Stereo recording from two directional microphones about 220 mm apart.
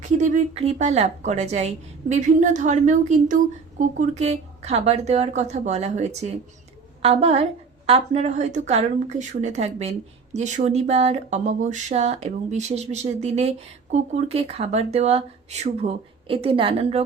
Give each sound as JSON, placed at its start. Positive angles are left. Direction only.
{"t": 0.0, "sound": "a woman's voice", "side_deg": -35}